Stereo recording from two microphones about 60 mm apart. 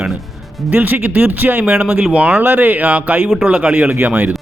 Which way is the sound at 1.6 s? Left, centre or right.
Centre.